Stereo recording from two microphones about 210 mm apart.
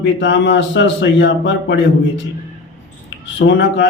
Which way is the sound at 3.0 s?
60° left (ahead or behind).